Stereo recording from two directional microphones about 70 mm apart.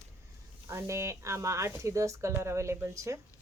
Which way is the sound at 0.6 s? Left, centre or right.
Right.